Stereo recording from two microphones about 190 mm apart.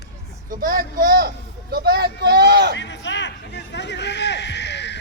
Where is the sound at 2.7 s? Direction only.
70° left (ahead or behind).